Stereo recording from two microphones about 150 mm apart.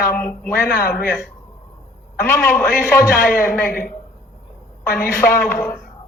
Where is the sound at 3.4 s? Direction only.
65° left (ahead or behind).